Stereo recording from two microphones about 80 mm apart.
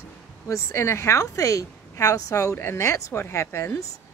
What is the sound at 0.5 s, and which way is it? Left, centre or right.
Speech, left.